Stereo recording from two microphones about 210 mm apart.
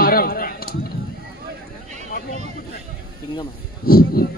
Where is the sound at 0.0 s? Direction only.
45° left (ahead or behind).